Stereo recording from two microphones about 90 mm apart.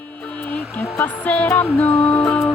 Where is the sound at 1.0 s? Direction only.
15° left (ahead or behind).